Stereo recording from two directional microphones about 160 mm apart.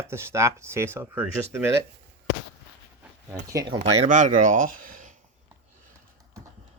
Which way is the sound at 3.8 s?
50° right (ahead or behind).